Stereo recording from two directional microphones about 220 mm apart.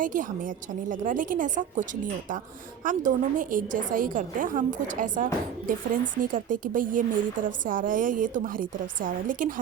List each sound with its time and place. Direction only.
0.0 s a woman's voice: 35° right (ahead or behind)